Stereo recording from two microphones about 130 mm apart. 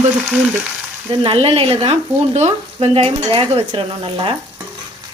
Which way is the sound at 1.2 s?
45° right (ahead or behind).